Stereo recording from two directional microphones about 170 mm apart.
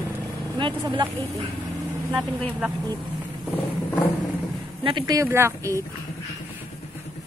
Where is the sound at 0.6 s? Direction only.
30° right (ahead or behind).